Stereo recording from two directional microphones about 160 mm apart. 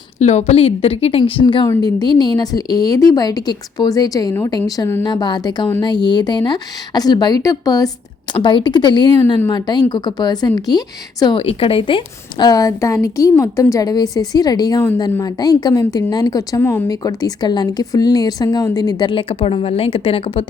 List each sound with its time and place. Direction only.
0.2 s a woman's voice: 45° left (ahead or behind); by 11.3 s 25° left (ahead or behind)
11.3 s a woman's voice: 35° left (ahead or behind)